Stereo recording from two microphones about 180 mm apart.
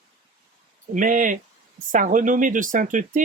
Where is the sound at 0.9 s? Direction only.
45° right (ahead or behind).